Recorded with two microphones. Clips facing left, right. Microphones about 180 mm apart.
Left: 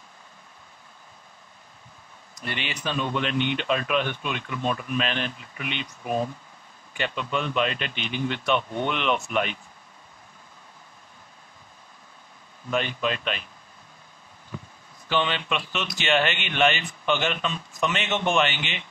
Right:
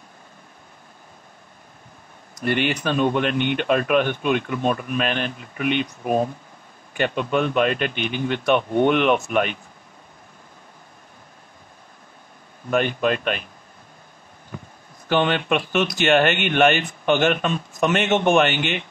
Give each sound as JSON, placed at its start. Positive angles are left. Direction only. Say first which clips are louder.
{"t": 2.4, "sound": "speech", "louder": "right 10 dB", "side_deg": -55}
{"t": 12.6, "sound": "speech", "louder": "right 6 dB", "side_deg": -55}
{"t": 15.0, "sound": "speech", "louder": "right 6 dB", "side_deg": -55}